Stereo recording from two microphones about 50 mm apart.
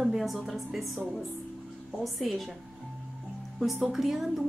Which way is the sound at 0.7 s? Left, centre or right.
Centre.